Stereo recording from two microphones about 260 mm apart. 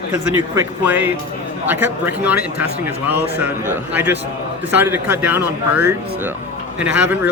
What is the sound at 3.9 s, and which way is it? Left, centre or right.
Speech, centre.